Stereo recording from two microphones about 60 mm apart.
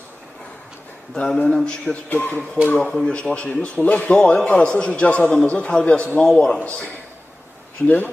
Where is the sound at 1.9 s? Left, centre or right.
Left.